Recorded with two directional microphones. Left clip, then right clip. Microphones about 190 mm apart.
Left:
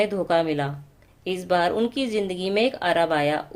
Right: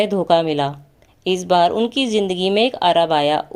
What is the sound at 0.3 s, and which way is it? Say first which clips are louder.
A woman's voice: right 6 dB; 25° right (ahead or behind).